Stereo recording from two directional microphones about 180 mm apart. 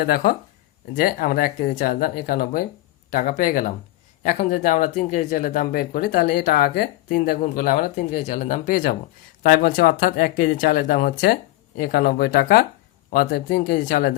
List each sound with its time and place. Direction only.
0.0 s speech: 55° left (ahead or behind)